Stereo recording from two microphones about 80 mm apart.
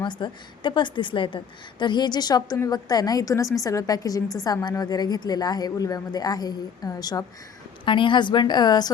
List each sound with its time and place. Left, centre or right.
0.0 s a woman's voice: left
1.8 s a woman's voice: left
7.9 s a woman's voice: left